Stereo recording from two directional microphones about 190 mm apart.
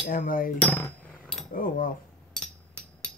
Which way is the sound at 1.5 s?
45° left (ahead or behind).